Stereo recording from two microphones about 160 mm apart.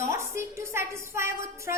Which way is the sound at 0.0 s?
15° right (ahead or behind).